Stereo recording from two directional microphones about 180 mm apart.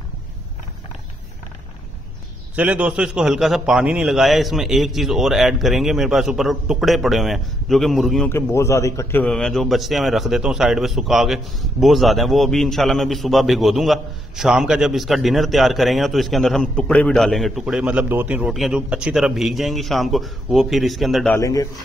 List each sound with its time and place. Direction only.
2.5 s a man's voice: 10° right (ahead or behind)
8.3 s a man's voice: 15° left (ahead or behind)
21.3 s a man's voice: 20° left (ahead or behind)